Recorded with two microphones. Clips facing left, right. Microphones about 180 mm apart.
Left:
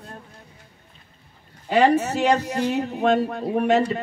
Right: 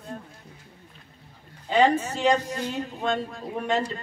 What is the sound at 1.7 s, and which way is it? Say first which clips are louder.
Speech: left 3 dB; 70° left (ahead or behind).